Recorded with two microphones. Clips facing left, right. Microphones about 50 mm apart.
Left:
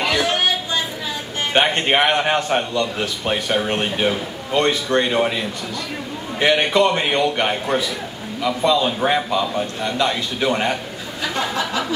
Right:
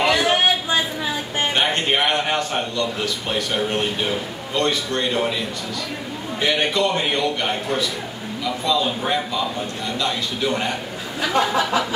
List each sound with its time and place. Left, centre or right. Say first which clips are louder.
0.0 s a sound: right 2 dB; centre
1.5 s a man's voice: left 5 dB; left
6.4 s a man's voice: left 4 dB; left
6.9 s a man's voice: left 2 dB; centre
9.0 s a man's voice: left 4 dB; left
11.3 s a sound: right 4 dB; centre